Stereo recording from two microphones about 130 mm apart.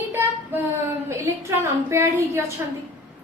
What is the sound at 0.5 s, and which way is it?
A woman's voice, 15° right (ahead or behind).